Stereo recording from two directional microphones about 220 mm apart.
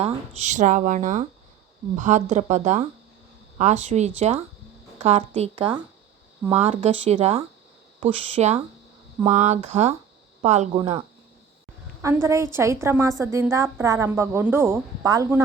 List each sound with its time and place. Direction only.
0.0 s speech: 30° right (ahead or behind)
12.0 s a woman's voice: 15° right (ahead or behind)